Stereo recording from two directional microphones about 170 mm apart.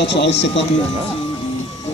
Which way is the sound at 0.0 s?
90° left.